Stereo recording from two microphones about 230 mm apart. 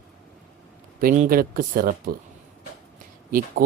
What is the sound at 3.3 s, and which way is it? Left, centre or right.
Speech, right.